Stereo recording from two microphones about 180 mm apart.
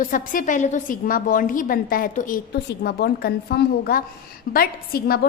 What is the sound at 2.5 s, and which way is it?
A woman's voice, 65° left (ahead or behind).